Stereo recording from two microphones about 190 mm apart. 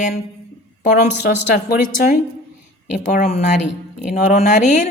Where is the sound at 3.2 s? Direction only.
35° left (ahead or behind).